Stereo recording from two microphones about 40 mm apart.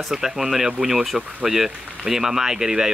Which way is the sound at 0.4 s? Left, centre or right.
Centre.